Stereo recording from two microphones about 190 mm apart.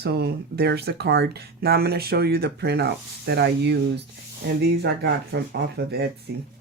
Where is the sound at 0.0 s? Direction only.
60° right (ahead or behind).